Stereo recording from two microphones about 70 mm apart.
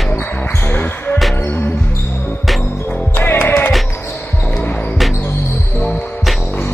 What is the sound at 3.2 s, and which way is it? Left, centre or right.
Music, left.